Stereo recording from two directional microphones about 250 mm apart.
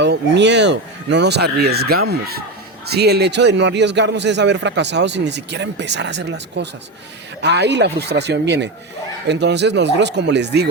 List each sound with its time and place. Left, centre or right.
0.0 s a man's voice: right